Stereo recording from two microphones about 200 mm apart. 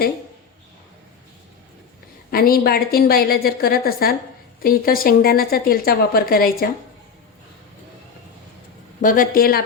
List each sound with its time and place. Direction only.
2.3 s a woman's voice: 50° left (ahead or behind)
9.0 s a woman's voice: 45° left (ahead or behind)